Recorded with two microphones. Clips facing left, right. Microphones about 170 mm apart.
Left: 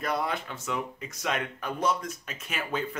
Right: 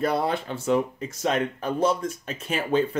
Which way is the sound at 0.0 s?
30° right (ahead or behind).